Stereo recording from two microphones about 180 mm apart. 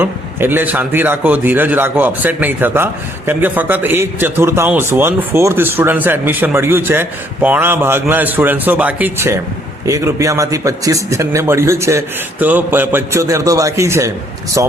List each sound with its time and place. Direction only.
0.0 s a man's voice: 10° right (ahead or behind)